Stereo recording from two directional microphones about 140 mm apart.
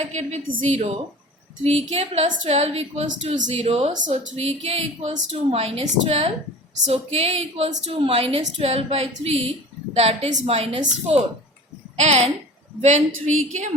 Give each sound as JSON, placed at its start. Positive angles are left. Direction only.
{"t": 0.0, "sound": "a woman's voice", "side_deg": -55}
{"t": 1.6, "sound": "a woman's voice", "side_deg": -50}
{"t": 11.9, "sound": "a woman's voice", "side_deg": -50}